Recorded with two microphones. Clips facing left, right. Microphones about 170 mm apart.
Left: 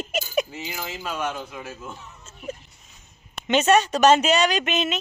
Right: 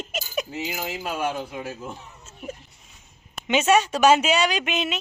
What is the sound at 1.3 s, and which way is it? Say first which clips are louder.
Speech: right 3 dB; 35° right (ahead or behind).